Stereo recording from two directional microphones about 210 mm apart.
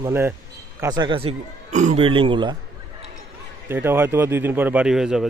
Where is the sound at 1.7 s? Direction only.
35° right (ahead or behind).